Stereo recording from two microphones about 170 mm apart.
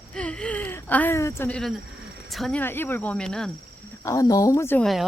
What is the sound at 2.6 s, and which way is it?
Speech, 10° left (ahead or behind).